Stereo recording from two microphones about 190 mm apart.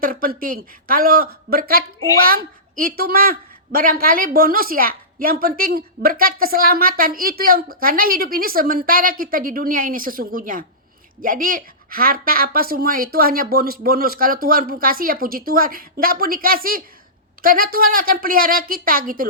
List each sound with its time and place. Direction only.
0.0 s a woman's voice: 50° right (ahead or behind)